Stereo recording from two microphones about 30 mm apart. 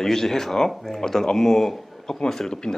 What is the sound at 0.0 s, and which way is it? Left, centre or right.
Speech, centre.